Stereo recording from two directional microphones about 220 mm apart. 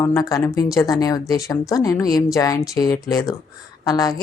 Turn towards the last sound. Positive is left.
turn(degrees=15)  # may be behind; listen again after turning